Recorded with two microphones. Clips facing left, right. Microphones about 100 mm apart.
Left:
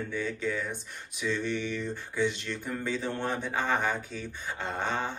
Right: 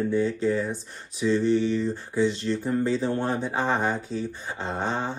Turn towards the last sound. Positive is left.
turn(degrees=-40)  # may be behind; listen again after turning